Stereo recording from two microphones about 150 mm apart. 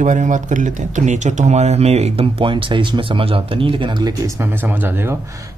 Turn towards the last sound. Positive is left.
turn(degrees=-20)  # may be behind; listen again after turning